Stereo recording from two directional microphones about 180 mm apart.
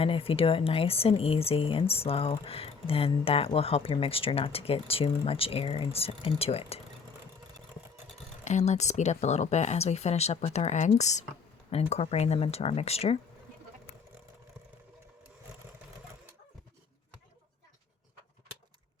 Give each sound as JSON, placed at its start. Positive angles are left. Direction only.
{"t": 0.0, "sound": "speech", "side_deg": 30}
{"t": 8.4, "sound": "speech", "side_deg": 40}